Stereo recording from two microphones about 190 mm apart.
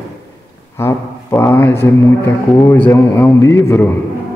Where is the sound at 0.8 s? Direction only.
15° left (ahead or behind).